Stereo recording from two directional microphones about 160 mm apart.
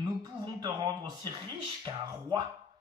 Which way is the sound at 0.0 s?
25° right (ahead or behind).